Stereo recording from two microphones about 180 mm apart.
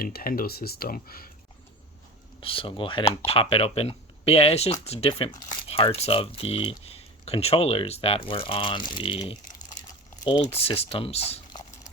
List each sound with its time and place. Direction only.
0.0 s speech: 55° left (ahead or behind)
2.4 s speech: 30° left (ahead or behind)
5.3 s crumpling: 45° left (ahead or behind)
5.7 s speech: 35° left (ahead or behind)
10.4 s speech: 35° left (ahead or behind)